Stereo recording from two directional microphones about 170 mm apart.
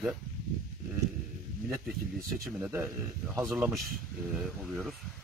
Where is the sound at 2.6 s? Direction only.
10° right (ahead or behind).